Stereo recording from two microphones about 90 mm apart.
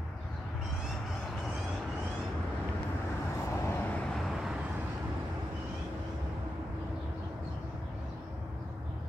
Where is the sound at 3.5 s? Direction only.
25° left (ahead or behind).